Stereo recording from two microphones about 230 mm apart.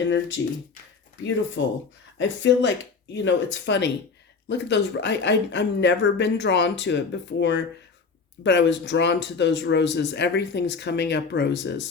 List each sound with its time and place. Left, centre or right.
1.2 s speech: left